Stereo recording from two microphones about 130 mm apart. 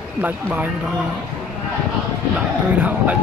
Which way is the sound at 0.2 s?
15° right (ahead or behind).